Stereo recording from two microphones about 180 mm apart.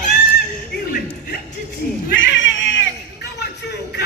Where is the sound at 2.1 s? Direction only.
90° left.